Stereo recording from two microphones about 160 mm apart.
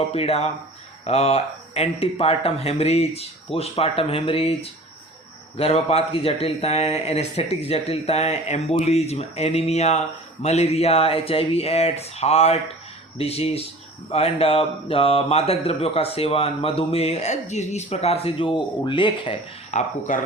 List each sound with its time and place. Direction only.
0.1 s speech: 40° left (ahead or behind)
20.1 s speech: 55° left (ahead or behind)